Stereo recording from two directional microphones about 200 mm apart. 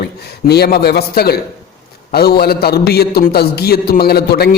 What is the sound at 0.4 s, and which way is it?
A man's voice, 55° left (ahead or behind).